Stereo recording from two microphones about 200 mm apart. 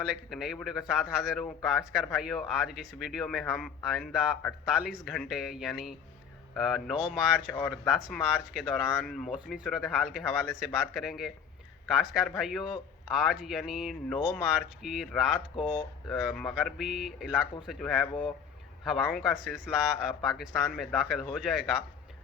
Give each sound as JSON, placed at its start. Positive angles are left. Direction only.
{"t": 0.1, "sound": "speech", "side_deg": 0}
{"t": 18.1, "sound": "speech", "side_deg": 25}
{"t": 18.9, "sound": "speech", "side_deg": 0}